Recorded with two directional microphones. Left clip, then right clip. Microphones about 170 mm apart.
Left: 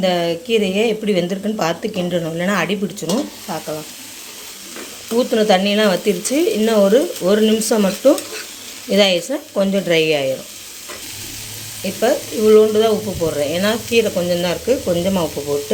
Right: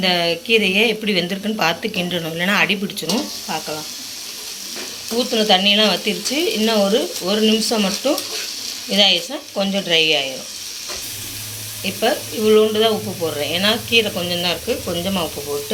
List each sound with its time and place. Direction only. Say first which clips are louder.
0.0 s a woman's voice: even; 30° left (ahead or behind)
5.1 s speech: left 2 dB; 50° left (ahead or behind)
8.0 s speech: left 5 dB; 45° left (ahead or behind)
11.9 s speech: left 3 dB; 40° left (ahead or behind)